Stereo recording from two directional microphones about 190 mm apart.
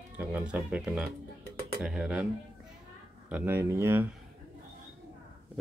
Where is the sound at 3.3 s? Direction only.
10° right (ahead or behind).